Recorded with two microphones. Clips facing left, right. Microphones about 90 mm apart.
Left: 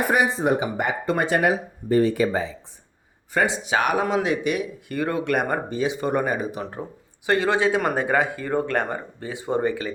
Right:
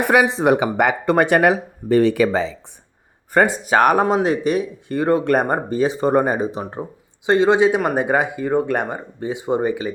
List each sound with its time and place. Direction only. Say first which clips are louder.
0.0 s speech: right 5 dB; 75° right (ahead or behind)
3.3 s speech: right 6 dB; 50° right (ahead or behind); by 9.9 s 15° right (ahead or behind)